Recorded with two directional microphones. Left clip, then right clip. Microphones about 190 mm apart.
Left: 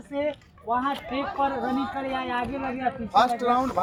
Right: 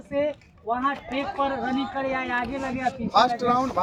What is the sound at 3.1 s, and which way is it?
Speech, 10° right (ahead or behind).